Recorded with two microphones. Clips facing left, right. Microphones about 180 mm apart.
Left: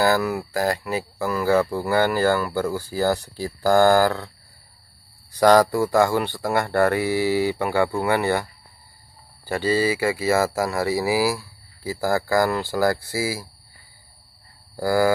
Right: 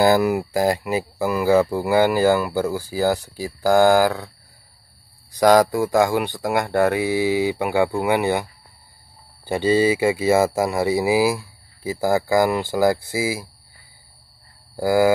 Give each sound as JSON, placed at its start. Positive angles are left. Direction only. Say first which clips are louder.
{"t": 0.0, "sound": "speech", "louder": "right 4 dB", "side_deg": -15}
{"t": 5.3, "sound": "speech", "louder": "right 1 dB", "side_deg": -15}
{"t": 9.5, "sound": "speech", "louder": "right 4 dB", "side_deg": -20}
{"t": 14.8, "sound": "speech", "louder": "right 3 dB", "side_deg": -15}